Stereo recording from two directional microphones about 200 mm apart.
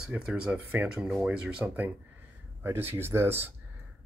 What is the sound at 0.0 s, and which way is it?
Speech, 5° right (ahead or behind).